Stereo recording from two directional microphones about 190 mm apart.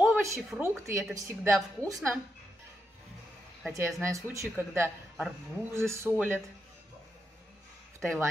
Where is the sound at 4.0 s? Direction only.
15° right (ahead or behind).